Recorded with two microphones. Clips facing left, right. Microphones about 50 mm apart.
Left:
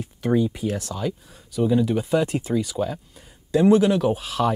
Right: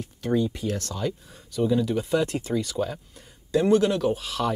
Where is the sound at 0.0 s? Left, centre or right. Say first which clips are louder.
Left 3 dB; centre.